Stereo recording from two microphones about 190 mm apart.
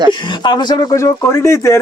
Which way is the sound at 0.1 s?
25° left (ahead or behind).